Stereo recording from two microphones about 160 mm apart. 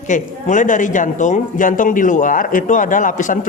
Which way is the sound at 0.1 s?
50° left (ahead or behind).